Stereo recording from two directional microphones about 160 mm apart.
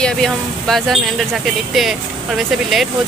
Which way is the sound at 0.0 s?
Centre (ahead or behind).